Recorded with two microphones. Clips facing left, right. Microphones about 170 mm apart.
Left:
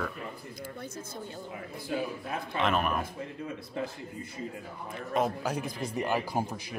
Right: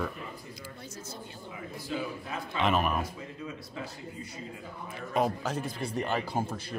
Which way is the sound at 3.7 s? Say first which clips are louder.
Left 4 dB; 50° left (ahead or behind).